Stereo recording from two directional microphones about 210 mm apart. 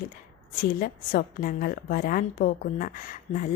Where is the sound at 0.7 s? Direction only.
40° left (ahead or behind).